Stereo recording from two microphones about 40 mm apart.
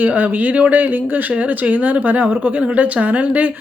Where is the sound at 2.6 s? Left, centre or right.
Right.